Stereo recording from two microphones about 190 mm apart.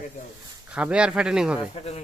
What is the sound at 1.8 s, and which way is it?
Speech, 30° left (ahead or behind).